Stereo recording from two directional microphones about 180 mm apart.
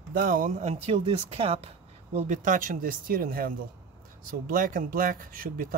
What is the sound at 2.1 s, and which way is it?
Speech, 45° right (ahead or behind).